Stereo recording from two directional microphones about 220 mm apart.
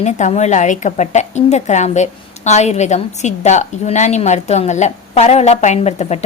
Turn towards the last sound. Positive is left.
turn(degrees=30)  # may be behind; listen again after turning